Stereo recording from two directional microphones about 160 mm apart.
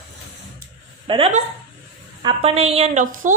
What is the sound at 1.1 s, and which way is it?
A woman's voice, 35° right (ahead or behind).